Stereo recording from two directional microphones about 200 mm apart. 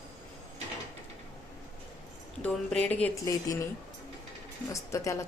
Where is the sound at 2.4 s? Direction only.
5° left (ahead or behind).